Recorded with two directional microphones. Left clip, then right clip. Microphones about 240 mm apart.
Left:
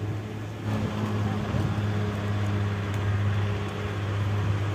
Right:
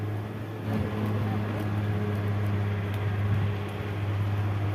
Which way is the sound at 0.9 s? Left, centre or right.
Left.